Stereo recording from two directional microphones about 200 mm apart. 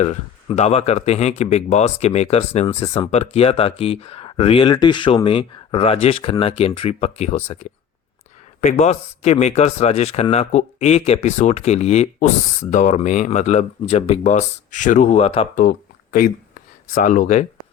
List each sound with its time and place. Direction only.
0.0 s speech: 35° left (ahead or behind)
16.9 s speech: 40° left (ahead or behind)